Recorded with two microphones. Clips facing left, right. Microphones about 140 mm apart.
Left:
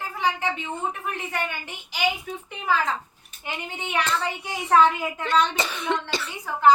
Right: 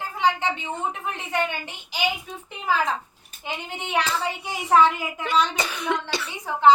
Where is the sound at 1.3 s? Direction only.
20° right (ahead or behind).